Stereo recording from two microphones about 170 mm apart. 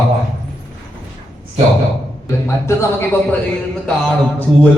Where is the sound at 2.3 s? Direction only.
15° left (ahead or behind).